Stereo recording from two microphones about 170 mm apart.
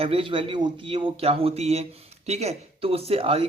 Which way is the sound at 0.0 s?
30° right (ahead or behind).